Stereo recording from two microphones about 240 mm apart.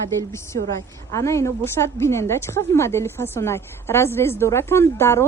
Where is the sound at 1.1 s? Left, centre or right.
Centre.